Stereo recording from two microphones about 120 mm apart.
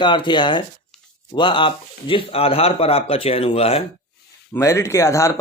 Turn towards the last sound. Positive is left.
turn(degrees=25)  # may be behind; listen again after turning